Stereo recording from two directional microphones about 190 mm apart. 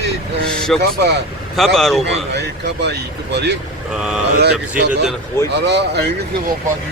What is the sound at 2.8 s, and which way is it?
Speech, 60° right (ahead or behind).